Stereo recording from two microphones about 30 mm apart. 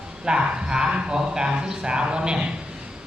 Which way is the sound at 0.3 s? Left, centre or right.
Right.